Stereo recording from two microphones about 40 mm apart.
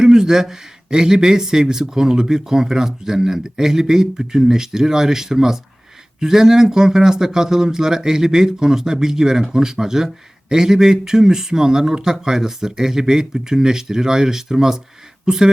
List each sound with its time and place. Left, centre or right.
0.0 s speech: centre